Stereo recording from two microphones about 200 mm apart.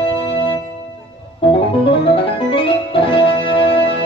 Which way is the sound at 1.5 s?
25° left (ahead or behind).